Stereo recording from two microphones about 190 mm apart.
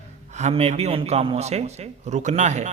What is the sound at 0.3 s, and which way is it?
A man's voice, 35° right (ahead or behind).